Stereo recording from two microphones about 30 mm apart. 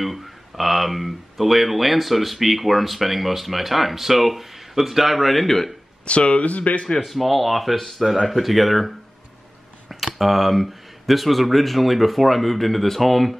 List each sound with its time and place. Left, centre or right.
0.0 s speech: centre
6.0 s speech: left
7.1 s speech: centre